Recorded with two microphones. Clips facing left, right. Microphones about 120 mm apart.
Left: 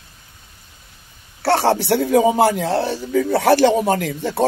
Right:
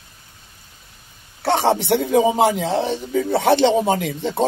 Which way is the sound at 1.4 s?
20° right (ahead or behind).